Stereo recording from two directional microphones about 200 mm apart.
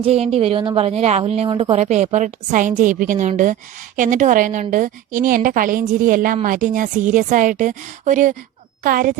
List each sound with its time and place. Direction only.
0.0 s a woman's voice: 30° right (ahead or behind)